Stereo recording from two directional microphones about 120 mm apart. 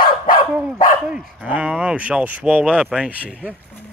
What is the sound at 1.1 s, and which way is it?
Speech, 10° right (ahead or behind).